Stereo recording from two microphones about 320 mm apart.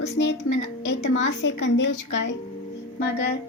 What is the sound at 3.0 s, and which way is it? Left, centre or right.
Music, left.